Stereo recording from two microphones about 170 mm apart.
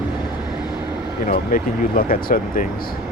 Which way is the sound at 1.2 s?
55° left (ahead or behind).